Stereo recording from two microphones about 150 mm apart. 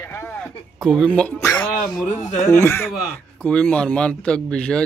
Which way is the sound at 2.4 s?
20° left (ahead or behind).